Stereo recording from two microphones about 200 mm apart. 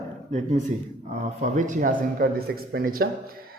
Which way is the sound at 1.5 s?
40° right (ahead or behind).